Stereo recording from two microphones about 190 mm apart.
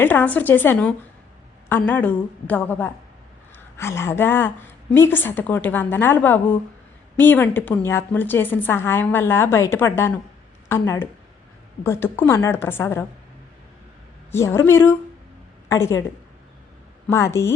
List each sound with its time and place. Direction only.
0.0 s a woman's voice: 10° left (ahead or behind)
14.3 s a woman's voice: 15° left (ahead or behind)
17.1 s a woman's voice: 15° left (ahead or behind)